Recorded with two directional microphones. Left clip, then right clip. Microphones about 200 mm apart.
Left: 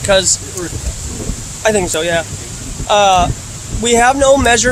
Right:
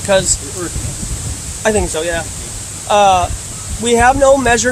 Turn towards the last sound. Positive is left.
turn(degrees=35)  # may be behind; listen again after turning